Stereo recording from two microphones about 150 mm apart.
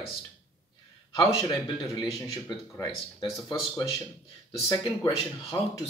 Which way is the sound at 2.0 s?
20° left (ahead or behind).